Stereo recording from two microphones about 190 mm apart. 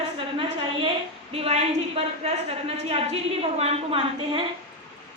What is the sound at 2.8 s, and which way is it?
A woman's voice, 30° right (ahead or behind).